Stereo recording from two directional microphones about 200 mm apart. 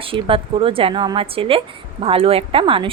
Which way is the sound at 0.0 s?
25° right (ahead or behind).